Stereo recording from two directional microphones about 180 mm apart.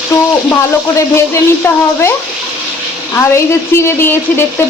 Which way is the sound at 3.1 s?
15° left (ahead or behind).